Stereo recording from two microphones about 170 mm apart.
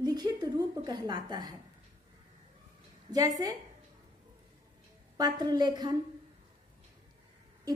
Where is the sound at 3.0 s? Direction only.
20° right (ahead or behind).